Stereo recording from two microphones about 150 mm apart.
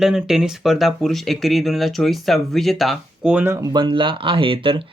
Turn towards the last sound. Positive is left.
turn(degrees=-35)  # may be behind; listen again after turning